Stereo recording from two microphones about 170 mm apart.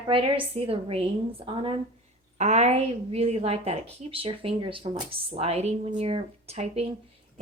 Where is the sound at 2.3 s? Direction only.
40° right (ahead or behind).